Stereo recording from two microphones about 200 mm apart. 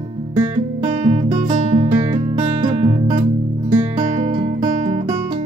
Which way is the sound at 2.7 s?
25° right (ahead or behind).